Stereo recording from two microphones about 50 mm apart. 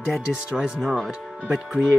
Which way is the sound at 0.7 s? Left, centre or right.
Centre.